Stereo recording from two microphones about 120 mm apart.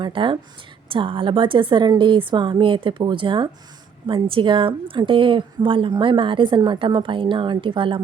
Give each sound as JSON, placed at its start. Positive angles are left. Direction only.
{"t": 0.0, "sound": "a woman's voice", "side_deg": -45}